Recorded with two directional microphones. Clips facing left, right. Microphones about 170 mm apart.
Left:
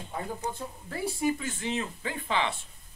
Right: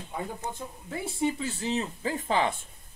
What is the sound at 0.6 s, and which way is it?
Speech, 20° right (ahead or behind).